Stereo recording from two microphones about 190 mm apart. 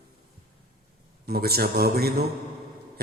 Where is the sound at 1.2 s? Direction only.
55° right (ahead or behind).